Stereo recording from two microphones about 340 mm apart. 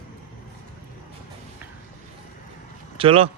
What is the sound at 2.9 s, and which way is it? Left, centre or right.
Speech, centre.